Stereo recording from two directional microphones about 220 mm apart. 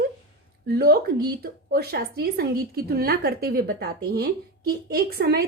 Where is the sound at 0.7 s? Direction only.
45° right (ahead or behind).